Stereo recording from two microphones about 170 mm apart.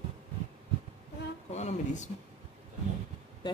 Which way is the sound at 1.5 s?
40° left (ahead or behind).